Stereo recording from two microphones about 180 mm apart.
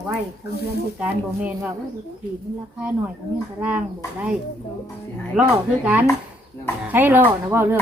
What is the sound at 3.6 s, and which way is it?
Speech, 5° right (ahead or behind).